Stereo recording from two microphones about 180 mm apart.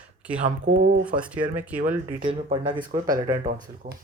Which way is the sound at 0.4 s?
45° right (ahead or behind).